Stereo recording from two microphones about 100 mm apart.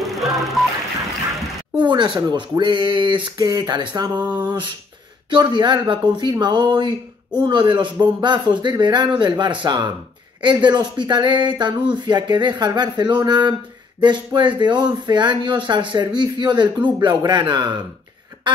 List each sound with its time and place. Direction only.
0.0 s music: centre (ahead or behind)
1.8 s speech: 50° right (ahead or behind)